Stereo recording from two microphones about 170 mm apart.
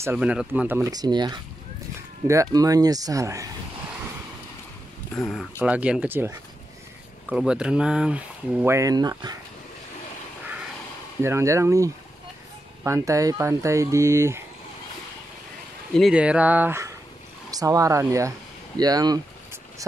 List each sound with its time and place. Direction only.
0.0 s speech: 10° right (ahead or behind)
5.1 s speech: 5° left (ahead or behind); by 9.4 s 20° right (ahead or behind)
11.2 s speech: 15° right (ahead or behind)
15.9 s speech: centre (ahead or behind); by 19.2 s 20° right (ahead or behind)